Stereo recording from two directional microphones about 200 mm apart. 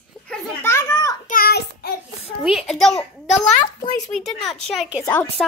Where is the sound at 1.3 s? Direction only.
50° left (ahead or behind).